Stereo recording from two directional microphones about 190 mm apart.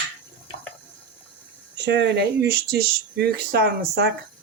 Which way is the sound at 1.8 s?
65° right (ahead or behind).